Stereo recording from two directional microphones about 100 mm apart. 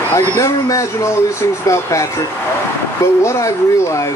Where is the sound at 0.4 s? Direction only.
35° left (ahead or behind).